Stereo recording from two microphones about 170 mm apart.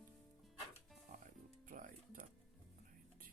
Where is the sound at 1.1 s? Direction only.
50° right (ahead or behind).